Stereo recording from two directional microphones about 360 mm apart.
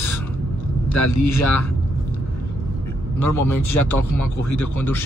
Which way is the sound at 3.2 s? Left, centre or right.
Left.